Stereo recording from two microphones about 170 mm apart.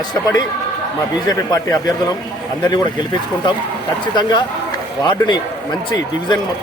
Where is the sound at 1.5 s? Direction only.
20° left (ahead or behind).